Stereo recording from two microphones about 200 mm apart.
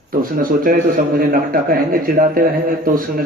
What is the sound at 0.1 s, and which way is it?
A man's voice, 45° right (ahead or behind).